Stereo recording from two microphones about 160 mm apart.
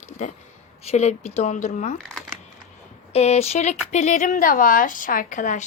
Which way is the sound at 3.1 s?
40° left (ahead or behind).